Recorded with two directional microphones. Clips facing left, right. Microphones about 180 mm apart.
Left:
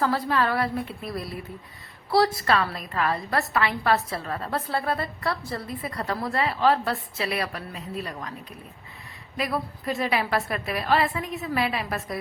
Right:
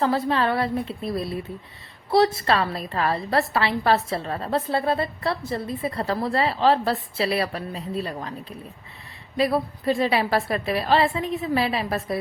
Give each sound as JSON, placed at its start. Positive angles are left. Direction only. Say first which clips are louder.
{"t": 0.0, "sound": "a woman's voice", "louder": "right 2 dB", "side_deg": -25}